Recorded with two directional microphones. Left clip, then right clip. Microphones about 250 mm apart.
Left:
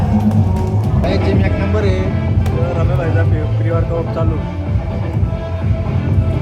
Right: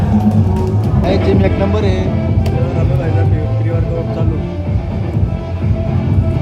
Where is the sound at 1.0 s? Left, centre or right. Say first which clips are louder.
Right 4 dB; right.